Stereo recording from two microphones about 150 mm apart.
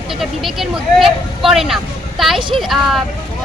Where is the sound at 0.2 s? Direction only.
Centre (ahead or behind).